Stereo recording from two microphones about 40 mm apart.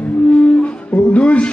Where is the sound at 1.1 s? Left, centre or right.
Left.